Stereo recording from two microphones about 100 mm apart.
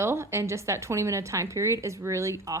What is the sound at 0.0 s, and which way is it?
A woman's voice, 25° right (ahead or behind).